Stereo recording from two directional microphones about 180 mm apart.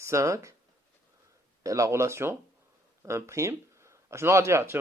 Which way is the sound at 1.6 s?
20° right (ahead or behind).